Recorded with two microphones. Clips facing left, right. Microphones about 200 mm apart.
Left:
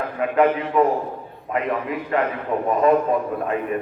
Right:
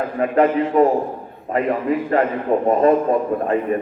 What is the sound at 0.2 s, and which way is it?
A man's voice, 40° right (ahead or behind).